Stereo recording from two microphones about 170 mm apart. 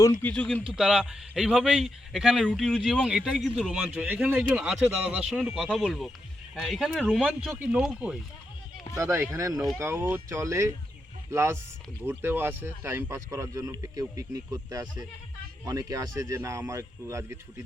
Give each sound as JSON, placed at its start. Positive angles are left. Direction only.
{"t": 0.2, "sound": "a man's voice", "side_deg": 10}
{"t": 9.0, "sound": "speech", "side_deg": -15}